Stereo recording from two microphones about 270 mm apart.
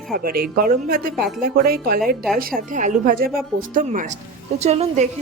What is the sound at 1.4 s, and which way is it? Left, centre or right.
A woman's voice, right.